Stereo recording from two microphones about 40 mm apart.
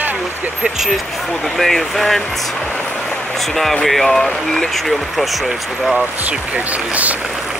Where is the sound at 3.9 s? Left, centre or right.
Centre.